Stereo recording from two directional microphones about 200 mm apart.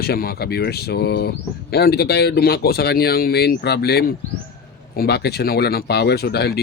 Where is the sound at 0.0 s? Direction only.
50° left (ahead or behind).